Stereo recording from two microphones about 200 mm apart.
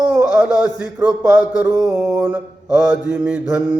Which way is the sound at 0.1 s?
5° right (ahead or behind).